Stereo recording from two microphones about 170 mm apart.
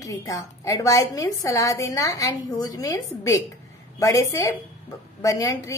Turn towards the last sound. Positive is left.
turn(degrees=20)  # may be behind; listen again after turning